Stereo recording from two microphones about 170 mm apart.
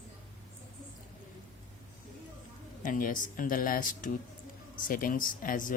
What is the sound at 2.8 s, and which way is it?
Speech, 50° left (ahead or behind).